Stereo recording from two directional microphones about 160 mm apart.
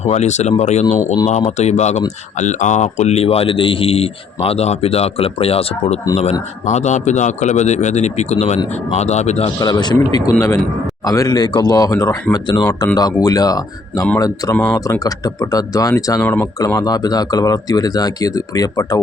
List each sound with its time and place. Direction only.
0.0 s a man's voice: 45° left (ahead or behind)
6.7 s a man's voice: 45° left (ahead or behind)
9.6 s speech: 25° left (ahead or behind)
14.5 s speech: 5° left (ahead or behind)
14.8 s speech: 20° left (ahead or behind)
16.6 s speech: 20° left (ahead or behind)